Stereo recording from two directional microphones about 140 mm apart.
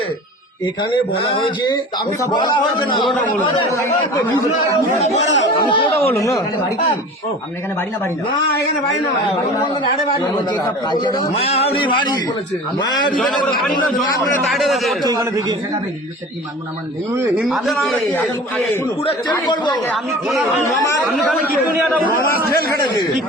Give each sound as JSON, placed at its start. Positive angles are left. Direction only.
{"t": 0.6, "sound": "speech", "side_deg": 35}
{"t": 3.7, "sound": "speech", "side_deg": 20}
{"t": 4.9, "sound": "a man's voice", "side_deg": 50}
{"t": 5.5, "sound": "speech", "side_deg": 35}
{"t": 6.0, "sound": "speech", "side_deg": 20}
{"t": 10.2, "sound": "speech", "side_deg": 30}
{"t": 11.3, "sound": "a man's voice", "side_deg": 45}
{"t": 12.8, "sound": "speech", "side_deg": 30}
{"t": 13.6, "sound": "a man's voice", "side_deg": 0}
{"t": 15.0, "sound": "a man's voice", "side_deg": -25}
{"t": 17.4, "sound": "a man's voice", "side_deg": 0}
{"t": 19.5, "sound": "speech", "side_deg": 30}
{"t": 21.1, "sound": "a man's voice", "side_deg": 0}
{"t": 22.1, "sound": "a man's voice", "side_deg": 90}